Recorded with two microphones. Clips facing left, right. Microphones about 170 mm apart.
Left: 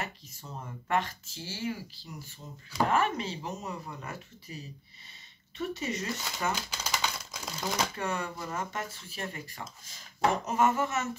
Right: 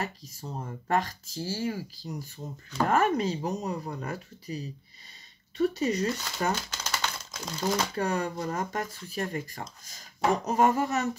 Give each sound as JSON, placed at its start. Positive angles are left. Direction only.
{"t": 0.0, "sound": "speech", "side_deg": -35}
{"t": 6.7, "sound": "typewriter", "side_deg": 5}
{"t": 7.9, "sound": "speech", "side_deg": -35}